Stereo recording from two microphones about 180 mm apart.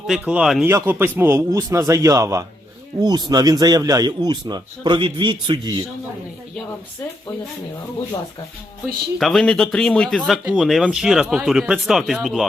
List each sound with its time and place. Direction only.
0.1 s a man's voice: 5° right (ahead or behind); by 5.8 s 25° right (ahead or behind)
9.1 s a man's voice: centre (ahead or behind)